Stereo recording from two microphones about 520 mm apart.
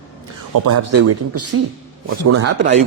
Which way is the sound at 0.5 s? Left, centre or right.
Right.